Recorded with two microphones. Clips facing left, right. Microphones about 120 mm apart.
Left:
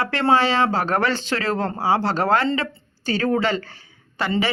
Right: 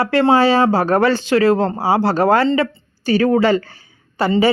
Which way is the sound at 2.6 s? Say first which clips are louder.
Right 9 dB; 30° left (ahead or behind).